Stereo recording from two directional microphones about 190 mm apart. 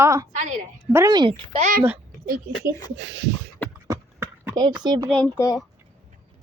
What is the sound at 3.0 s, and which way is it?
Speech, 75° right (ahead or behind).